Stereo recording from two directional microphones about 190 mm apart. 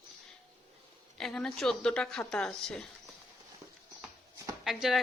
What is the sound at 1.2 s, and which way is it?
Speech, 5° left (ahead or behind).